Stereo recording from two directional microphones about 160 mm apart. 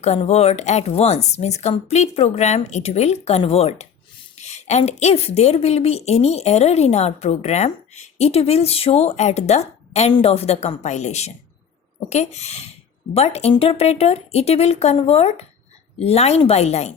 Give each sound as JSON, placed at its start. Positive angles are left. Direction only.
{"t": 0.0, "sound": "a woman's voice", "side_deg": 45}